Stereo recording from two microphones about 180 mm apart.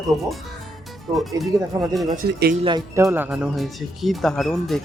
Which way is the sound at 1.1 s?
Centre (ahead or behind).